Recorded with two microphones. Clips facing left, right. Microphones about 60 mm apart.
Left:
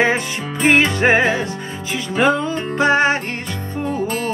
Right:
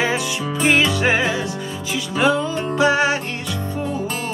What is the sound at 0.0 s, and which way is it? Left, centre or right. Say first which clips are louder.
Music: left 3 dB; left.